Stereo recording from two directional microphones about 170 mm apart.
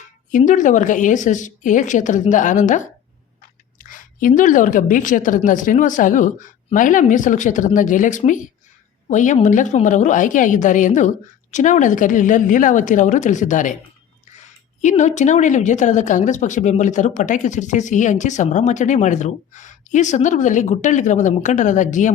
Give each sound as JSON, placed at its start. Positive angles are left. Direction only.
{"t": 0.3, "sound": "a woman's voice", "side_deg": 50}
{"t": 14.8, "sound": "a woman's voice", "side_deg": 45}